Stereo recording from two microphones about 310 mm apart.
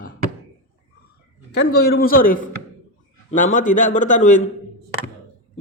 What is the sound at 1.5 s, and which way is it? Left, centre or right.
A man's voice, left.